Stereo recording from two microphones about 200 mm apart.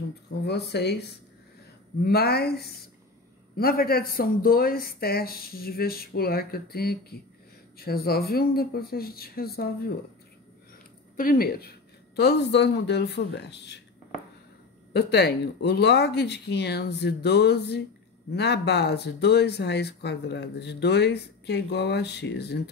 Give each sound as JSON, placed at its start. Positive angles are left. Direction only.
{"t": 0.5, "sound": "speech", "side_deg": 55}
{"t": 2.0, "sound": "speech", "side_deg": 50}
{"t": 11.1, "sound": "speech", "side_deg": 45}
{"t": 14.9, "sound": "speech", "side_deg": 55}